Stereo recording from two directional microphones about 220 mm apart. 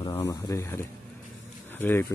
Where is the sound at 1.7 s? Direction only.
10° left (ahead or behind).